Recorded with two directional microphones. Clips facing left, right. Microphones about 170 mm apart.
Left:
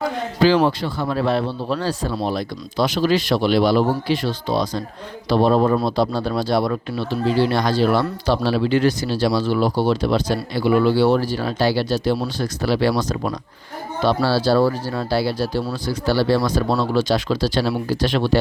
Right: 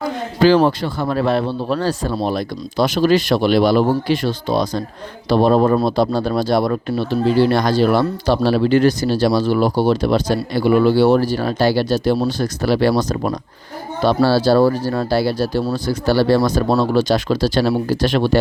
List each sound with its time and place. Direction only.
0.4 s speech: 50° right (ahead or behind)